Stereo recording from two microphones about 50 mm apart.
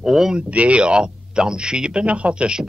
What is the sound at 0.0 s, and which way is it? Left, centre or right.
Speech, centre.